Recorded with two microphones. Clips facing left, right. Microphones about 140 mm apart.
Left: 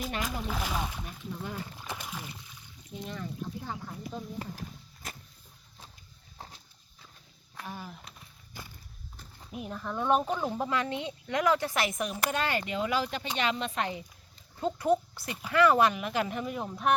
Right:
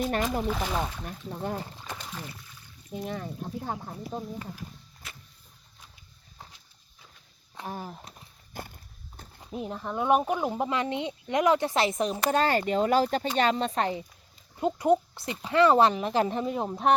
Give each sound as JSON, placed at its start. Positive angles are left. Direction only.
{"t": 0.4, "sound": "speech", "side_deg": 0}
{"t": 1.0, "sound": "speech", "side_deg": -45}
{"t": 1.8, "sound": "splash", "side_deg": 10}
{"t": 3.0, "sound": "speech", "side_deg": -55}
{"t": 5.0, "sound": "vehicle", "side_deg": 40}
{"t": 7.7, "sound": "a sound", "side_deg": -40}
{"t": 9.5, "sound": "speech", "side_deg": -25}
{"t": 14.5, "sound": "speech", "side_deg": -20}